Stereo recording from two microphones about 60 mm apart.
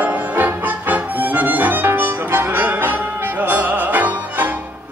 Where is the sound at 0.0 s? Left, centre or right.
Right.